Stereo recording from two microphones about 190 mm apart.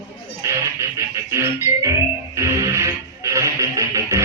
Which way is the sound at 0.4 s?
15° right (ahead or behind).